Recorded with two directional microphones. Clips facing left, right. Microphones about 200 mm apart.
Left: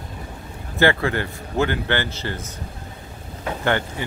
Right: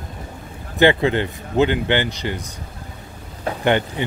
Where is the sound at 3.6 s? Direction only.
20° right (ahead or behind).